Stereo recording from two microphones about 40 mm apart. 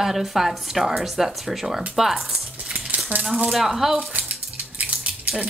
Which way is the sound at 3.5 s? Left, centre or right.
Centre.